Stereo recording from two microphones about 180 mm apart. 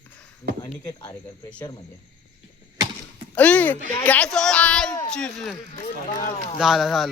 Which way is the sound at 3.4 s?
10° left (ahead or behind).